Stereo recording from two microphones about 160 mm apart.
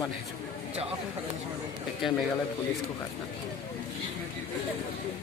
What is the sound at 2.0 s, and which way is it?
Speech, centre (ahead or behind).